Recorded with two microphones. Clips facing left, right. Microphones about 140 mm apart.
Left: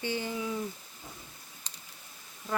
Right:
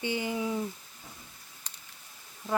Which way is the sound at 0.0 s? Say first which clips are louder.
Right 2 dB; 15° right (ahead or behind).